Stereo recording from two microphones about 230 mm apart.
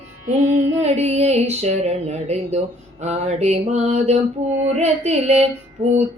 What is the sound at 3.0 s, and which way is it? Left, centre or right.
Mantra, right.